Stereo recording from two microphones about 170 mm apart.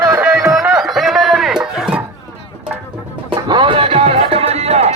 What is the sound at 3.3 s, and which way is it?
Music, 30° right (ahead or behind).